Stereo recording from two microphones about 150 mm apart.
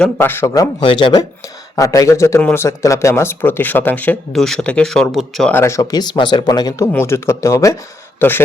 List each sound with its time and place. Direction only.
0.0 s speech: 15° left (ahead or behind)
5.5 s speech: 20° left (ahead or behind)